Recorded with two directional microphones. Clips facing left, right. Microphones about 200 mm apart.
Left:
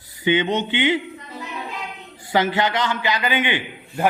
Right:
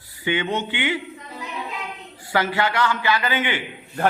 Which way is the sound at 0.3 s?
20° left (ahead or behind).